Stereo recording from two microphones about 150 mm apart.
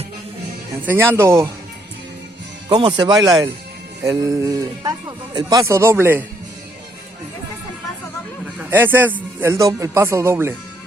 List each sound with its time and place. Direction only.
0.9 s speech: 15° right (ahead or behind)
2.6 s speech: 30° right (ahead or behind)
8.5 s speech: 15° right (ahead or behind)